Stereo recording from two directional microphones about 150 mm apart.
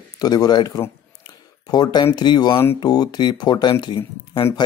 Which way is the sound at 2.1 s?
30° left (ahead or behind).